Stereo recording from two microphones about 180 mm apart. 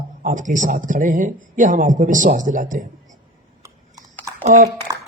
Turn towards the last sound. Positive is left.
turn(degrees=-20)  # may be behind; listen again after turning